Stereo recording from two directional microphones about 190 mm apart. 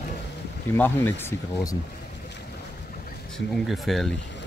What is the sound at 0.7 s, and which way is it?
Speech, 10° left (ahead or behind).